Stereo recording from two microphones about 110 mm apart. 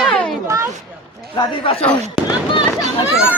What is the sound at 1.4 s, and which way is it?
Speech, 55° left (ahead or behind).